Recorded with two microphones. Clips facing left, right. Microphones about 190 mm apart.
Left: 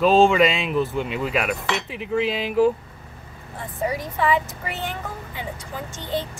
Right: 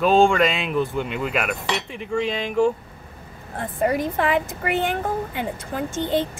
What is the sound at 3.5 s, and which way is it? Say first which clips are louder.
Speech: right 5 dB; 55° right (ahead or behind).